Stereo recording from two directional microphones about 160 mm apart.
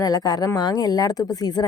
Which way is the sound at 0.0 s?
25° left (ahead or behind).